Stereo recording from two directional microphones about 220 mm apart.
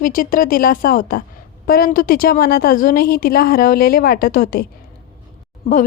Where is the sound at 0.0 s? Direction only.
40° left (ahead or behind).